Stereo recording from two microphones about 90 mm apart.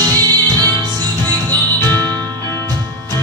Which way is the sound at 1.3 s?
20° left (ahead or behind).